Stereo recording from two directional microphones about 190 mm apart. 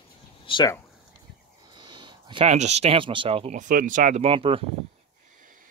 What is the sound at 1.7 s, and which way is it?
Speech, 25° right (ahead or behind).